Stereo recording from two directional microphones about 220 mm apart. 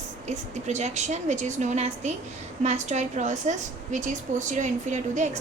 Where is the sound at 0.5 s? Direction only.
30° right (ahead or behind).